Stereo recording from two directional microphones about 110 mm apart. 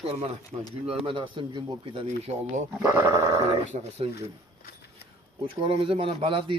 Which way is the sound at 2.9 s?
25° right (ahead or behind).